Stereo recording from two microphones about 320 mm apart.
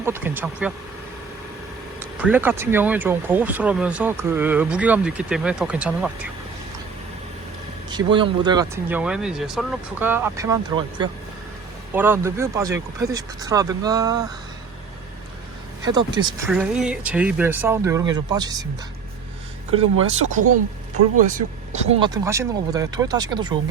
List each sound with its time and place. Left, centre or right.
0.0 s speech: centre
2.1 s speech: centre
7.9 s speech: centre
15.8 s speech: centre
16.5 s speech: centre
20.1 s speech: right